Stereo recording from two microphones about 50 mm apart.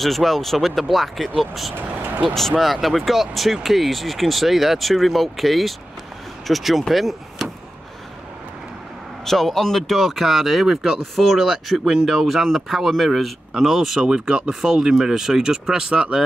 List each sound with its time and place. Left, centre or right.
0.0 s speech: centre
1.8 s vehicle: right
2.2 s speech: centre
9.2 s speech: centre